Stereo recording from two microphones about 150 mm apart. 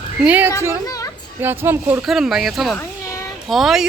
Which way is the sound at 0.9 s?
25° left (ahead or behind).